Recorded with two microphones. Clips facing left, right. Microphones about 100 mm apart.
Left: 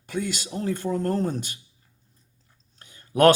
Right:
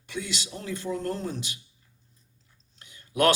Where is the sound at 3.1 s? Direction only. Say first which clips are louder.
Left 6 dB; 45° left (ahead or behind).